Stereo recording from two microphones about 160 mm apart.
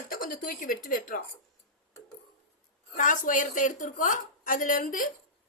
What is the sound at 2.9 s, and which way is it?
A woman's voice, 55° left (ahead or behind).